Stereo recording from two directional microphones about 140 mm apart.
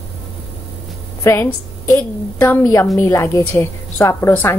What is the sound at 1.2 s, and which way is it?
Speech, 20° left (ahead or behind).